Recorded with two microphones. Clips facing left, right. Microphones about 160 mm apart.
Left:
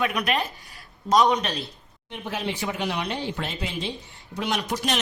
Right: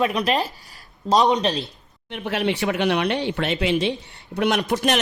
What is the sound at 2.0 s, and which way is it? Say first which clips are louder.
Speech: right 6 dB; 70° right (ahead or behind).